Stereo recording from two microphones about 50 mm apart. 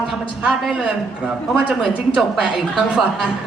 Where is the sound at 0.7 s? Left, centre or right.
Right.